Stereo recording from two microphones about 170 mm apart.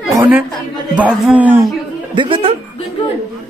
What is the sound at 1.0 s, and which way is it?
Speech, 5° right (ahead or behind).